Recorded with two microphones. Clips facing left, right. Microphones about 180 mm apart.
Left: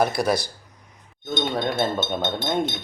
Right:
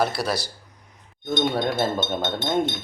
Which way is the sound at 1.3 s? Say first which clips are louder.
Right 2 dB; centre (ahead or behind).